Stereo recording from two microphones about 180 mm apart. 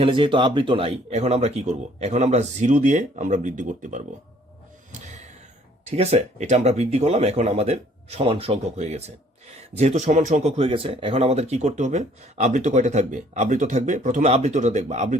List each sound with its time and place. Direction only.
0.0 s speech: 30° right (ahead or behind); by 4.0 s 45° right (ahead or behind)
5.8 s speech: 35° right (ahead or behind)